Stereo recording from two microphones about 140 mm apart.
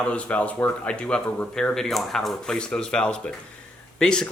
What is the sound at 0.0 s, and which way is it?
Speech, 10° left (ahead or behind).